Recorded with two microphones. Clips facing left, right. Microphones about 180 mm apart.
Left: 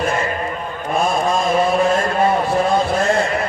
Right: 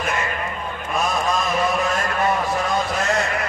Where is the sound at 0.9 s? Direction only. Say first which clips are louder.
Left 4 dB; 30° left (ahead or behind).